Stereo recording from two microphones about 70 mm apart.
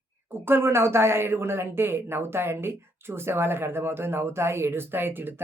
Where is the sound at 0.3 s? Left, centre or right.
Right.